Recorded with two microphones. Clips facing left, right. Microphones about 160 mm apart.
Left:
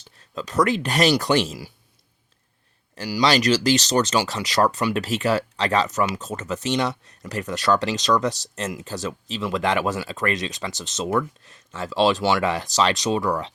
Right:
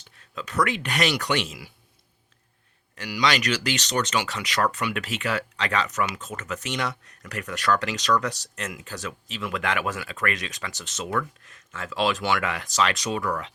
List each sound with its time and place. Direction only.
0.2 s speech: 35° left (ahead or behind)
2.9 s speech: 35° left (ahead or behind)